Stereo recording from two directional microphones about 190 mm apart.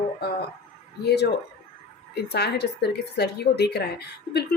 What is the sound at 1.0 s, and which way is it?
Speech, 60° left (ahead or behind).